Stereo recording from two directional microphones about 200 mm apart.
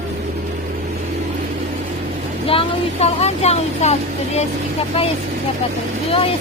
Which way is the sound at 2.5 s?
30° left (ahead or behind).